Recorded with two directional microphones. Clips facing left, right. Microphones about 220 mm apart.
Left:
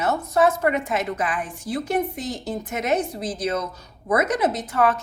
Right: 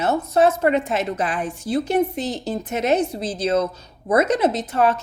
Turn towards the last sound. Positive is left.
turn(degrees=-25)  # may be behind; listen again after turning